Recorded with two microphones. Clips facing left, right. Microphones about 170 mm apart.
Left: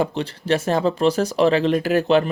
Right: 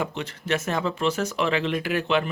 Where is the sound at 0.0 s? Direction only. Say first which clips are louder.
Left 7 dB; 35° left (ahead or behind).